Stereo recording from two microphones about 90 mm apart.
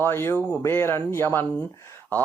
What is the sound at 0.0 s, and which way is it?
Speech, 25° left (ahead or behind).